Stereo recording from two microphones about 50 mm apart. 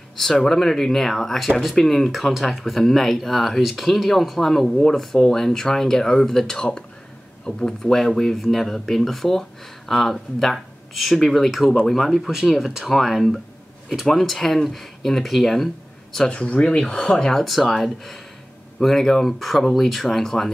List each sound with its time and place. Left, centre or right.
0.2 s speech: centre
16.3 s speech: left; by 20.5 s centre